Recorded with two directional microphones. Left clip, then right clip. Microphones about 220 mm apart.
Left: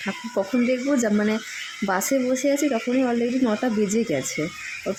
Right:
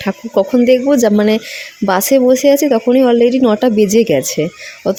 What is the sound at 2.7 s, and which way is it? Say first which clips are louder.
A woman's voice: right 12 dB; 35° right (ahead or behind).